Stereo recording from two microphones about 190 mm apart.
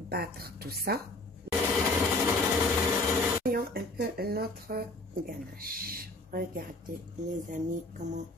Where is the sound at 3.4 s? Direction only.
50° right (ahead or behind).